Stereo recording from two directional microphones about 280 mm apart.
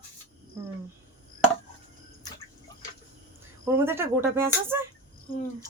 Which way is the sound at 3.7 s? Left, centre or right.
Centre.